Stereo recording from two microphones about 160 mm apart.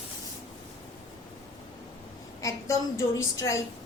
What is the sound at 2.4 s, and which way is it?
A woman's voice, 20° left (ahead or behind).